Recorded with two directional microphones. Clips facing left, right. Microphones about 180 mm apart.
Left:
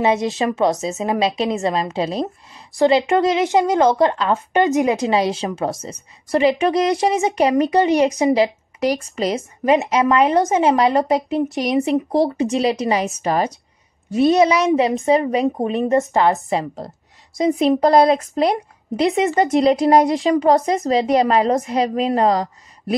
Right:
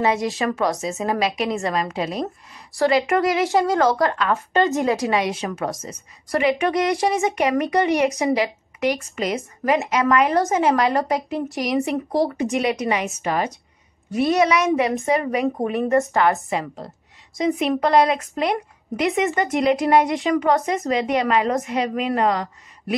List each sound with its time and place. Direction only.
0.0 s a woman's voice: 20° left (ahead or behind)
14.1 s a woman's voice: 25° left (ahead or behind)
16.4 s speech: 35° left (ahead or behind)